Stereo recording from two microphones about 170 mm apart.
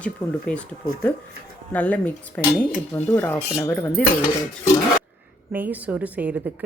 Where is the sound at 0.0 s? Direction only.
5° left (ahead or behind).